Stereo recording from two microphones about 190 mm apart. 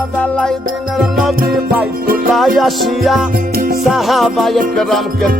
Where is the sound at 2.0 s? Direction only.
50° right (ahead or behind).